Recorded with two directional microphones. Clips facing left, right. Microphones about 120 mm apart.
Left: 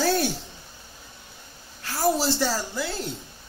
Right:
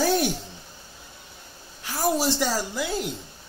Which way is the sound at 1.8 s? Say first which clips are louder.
Left 1 dB; 15° right (ahead or behind).